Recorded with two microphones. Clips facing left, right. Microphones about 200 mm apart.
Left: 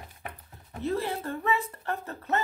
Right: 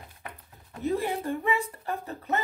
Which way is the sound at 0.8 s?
15° right (ahead or behind).